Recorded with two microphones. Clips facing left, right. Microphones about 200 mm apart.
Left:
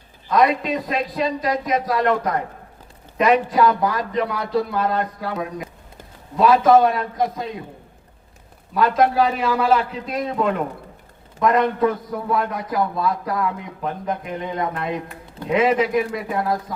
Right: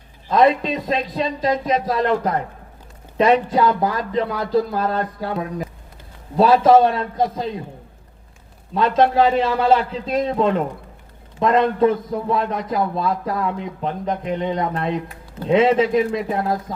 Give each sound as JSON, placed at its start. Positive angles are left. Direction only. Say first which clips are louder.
{"t": 0.3, "sound": "a man's voice", "louder": "right 2 dB", "side_deg": -30}
{"t": 8.7, "sound": "a man's voice", "louder": "right 1 dB", "side_deg": -25}